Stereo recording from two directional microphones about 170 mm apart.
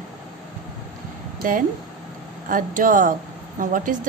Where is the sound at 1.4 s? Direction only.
50° right (ahead or behind).